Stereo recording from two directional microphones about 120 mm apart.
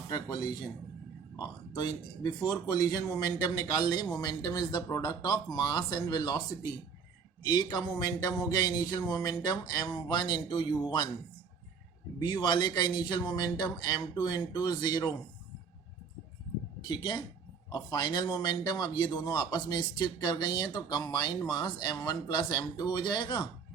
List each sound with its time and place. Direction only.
0.1 s speech: 35° left (ahead or behind)
7.4 s speech: 35° left (ahead or behind)
12.2 s speech: 35° left (ahead or behind)
16.8 s speech: 40° left (ahead or behind)